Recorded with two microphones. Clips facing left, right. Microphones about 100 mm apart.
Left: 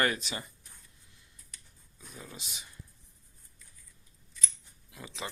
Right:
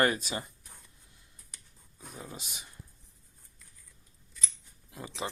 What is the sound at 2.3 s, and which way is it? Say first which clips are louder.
Speech: right 2 dB; 55° right (ahead or behind).